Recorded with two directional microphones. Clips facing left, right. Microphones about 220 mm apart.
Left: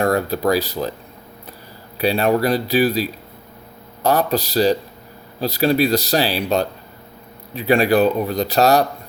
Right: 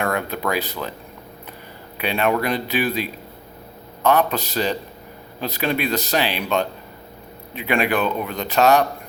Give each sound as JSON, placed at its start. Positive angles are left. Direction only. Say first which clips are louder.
{"t": 0.0, "sound": "speech", "louder": "left 6 dB", "side_deg": 35}
{"t": 2.0, "sound": "speech", "louder": "left 4 dB", "side_deg": 35}